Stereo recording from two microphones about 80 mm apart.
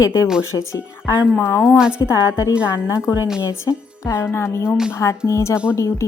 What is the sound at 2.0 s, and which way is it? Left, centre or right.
Speech, left.